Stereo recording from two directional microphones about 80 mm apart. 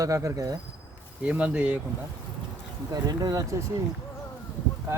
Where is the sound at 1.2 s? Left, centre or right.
Centre.